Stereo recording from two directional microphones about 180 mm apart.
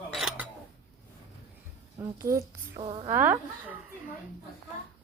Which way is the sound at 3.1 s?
10° right (ahead or behind).